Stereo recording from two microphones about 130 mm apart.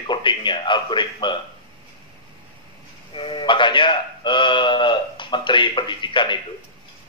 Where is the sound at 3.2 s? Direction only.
40° left (ahead or behind).